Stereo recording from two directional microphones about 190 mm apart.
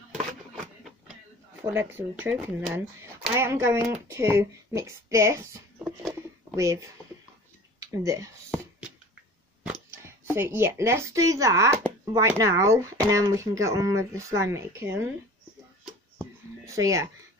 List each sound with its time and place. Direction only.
1.7 s speech: 10° right (ahead or behind)
9.6 s speech: 15° right (ahead or behind)
16.2 s a sound: 15° right (ahead or behind)